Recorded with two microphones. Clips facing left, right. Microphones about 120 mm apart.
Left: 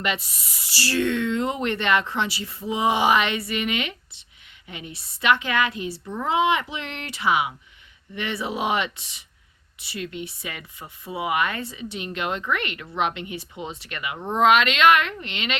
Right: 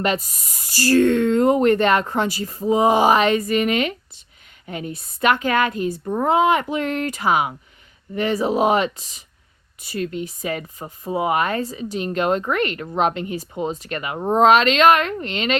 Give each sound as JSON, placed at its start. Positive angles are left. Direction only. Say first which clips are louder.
{"t": 0.0, "sound": "speech", "louder": "right 6 dB", "side_deg": -40}